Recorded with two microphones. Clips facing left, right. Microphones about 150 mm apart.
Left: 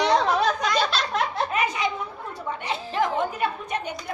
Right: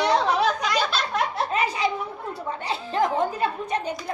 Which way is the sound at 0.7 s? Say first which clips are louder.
Left 1 dB; 10° right (ahead or behind).